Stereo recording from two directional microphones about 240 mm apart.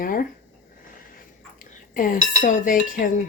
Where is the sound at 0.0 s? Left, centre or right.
Left.